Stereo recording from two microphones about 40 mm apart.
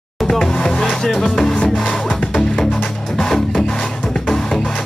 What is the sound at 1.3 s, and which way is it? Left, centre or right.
Music, centre.